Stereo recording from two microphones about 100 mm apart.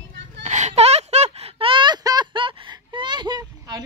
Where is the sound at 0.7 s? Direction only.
90° right.